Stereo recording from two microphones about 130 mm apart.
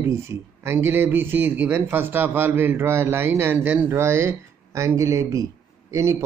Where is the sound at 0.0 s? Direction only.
20° right (ahead or behind).